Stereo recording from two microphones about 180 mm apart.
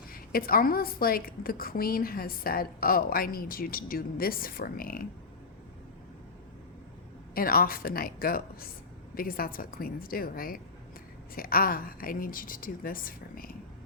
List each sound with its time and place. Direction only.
0.1 s a woman's voice: 55° left (ahead or behind)
7.3 s a woman's voice: 55° left (ahead or behind)